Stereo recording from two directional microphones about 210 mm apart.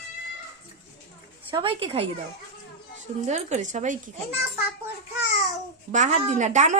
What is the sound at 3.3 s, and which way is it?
Speech, 35° right (ahead or behind).